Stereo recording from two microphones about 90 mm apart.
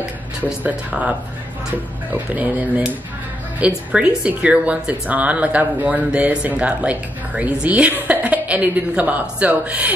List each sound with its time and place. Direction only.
0.5 s speech: 15° right (ahead or behind)
2.1 s speech: 20° right (ahead or behind)